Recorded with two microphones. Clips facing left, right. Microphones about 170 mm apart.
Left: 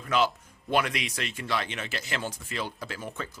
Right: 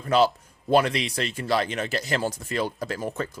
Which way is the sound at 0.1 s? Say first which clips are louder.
Right 5 dB; 35° right (ahead or behind).